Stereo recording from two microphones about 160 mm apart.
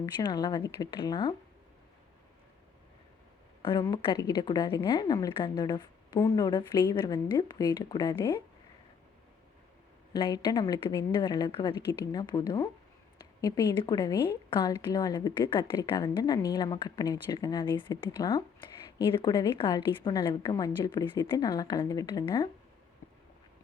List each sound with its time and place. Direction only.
0.0 s a woman's voice: 25° left (ahead or behind)
3.7 s a woman's voice: 25° left (ahead or behind)
10.1 s a woman's voice: 25° left (ahead or behind)